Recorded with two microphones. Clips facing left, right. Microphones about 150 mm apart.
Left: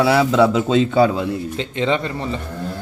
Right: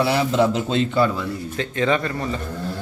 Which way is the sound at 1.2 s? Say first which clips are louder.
Left 4 dB; 20° left (ahead or behind).